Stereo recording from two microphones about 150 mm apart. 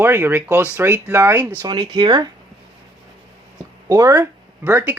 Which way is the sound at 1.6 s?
30° right (ahead or behind).